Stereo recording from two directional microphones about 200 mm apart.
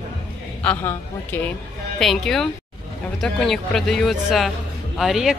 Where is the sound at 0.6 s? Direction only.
10° left (ahead or behind).